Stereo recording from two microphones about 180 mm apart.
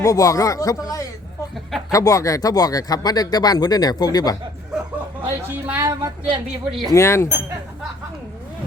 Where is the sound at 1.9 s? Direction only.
20° left (ahead or behind).